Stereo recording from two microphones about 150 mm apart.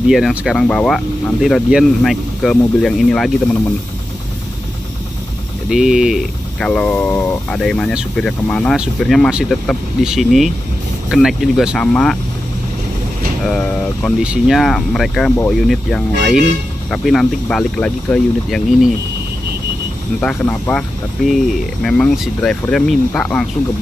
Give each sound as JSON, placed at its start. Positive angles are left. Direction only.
{"t": 0.1, "sound": "speech", "side_deg": -5}
{"t": 5.7, "sound": "speech", "side_deg": -5}
{"t": 6.7, "sound": "speech", "side_deg": 10}
{"t": 13.5, "sound": "speech", "side_deg": 5}
{"t": 20.2, "sound": "speech", "side_deg": 10}
{"t": 21.8, "sound": "speech", "side_deg": 5}